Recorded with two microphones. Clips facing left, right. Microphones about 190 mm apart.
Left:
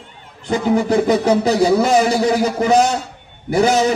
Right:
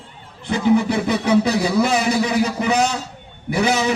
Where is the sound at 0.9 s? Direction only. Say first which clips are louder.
Left 5 dB; 40° left (ahead or behind).